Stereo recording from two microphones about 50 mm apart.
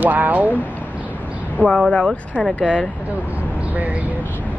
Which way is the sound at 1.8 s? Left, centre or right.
Centre.